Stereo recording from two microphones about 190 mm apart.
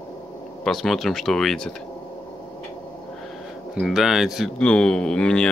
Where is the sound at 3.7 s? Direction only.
Centre (ahead or behind).